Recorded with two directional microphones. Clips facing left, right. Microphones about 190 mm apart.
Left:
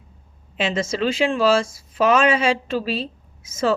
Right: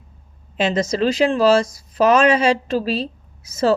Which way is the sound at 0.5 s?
40° right (ahead or behind).